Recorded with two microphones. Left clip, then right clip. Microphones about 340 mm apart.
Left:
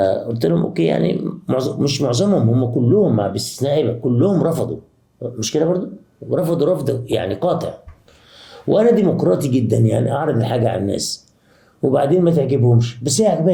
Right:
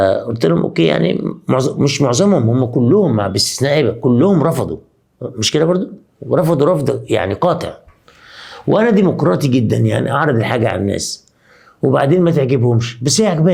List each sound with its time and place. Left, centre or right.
0.0 s speech: right
8.3 s a sound: right
8.7 s speech: right